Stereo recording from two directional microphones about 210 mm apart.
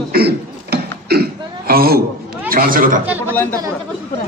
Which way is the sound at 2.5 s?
45° right (ahead or behind).